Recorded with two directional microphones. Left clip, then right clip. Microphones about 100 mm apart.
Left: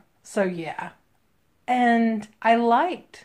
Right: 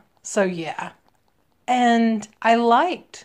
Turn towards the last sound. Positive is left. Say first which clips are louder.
# right 3 dB
turn(degrees=-20)  # may be behind; listen again after turning